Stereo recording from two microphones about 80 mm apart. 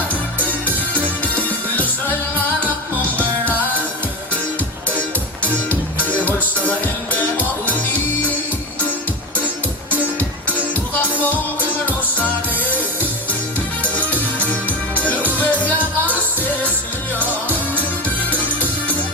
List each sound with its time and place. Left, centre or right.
0.1 s music: centre
4.9 s music: centre
9.9 s music: centre
13.8 s music: centre